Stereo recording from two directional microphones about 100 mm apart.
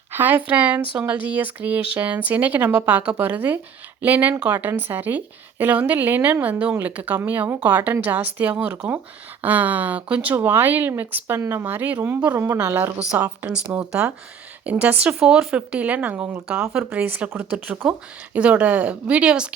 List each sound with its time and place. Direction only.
0.1 s a woman's voice: 20° right (ahead or behind)